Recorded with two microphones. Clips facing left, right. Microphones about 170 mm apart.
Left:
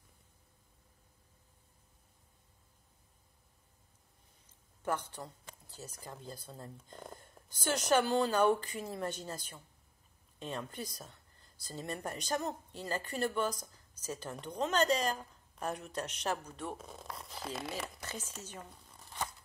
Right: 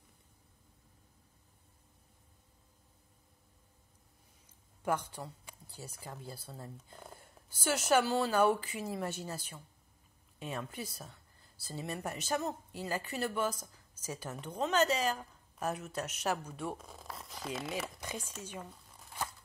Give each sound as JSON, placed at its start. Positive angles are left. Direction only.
{"t": 4.5, "sound": "speech", "side_deg": -10}
{"t": 18.0, "sound": "speech", "side_deg": -10}